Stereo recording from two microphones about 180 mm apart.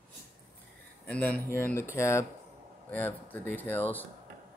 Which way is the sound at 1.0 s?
10° left (ahead or behind).